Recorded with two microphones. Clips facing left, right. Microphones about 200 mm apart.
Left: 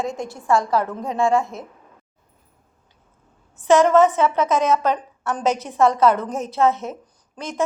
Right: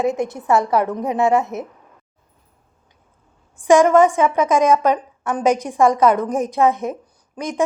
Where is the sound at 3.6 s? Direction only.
15° right (ahead or behind).